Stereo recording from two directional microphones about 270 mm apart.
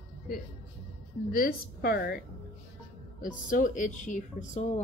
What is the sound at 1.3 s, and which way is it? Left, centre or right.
Speech, left.